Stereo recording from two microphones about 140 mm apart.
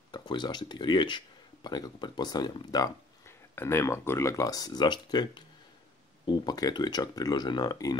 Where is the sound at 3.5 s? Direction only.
15° left (ahead or behind).